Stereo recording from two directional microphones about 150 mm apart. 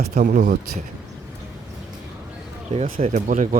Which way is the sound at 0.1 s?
65° right (ahead or behind).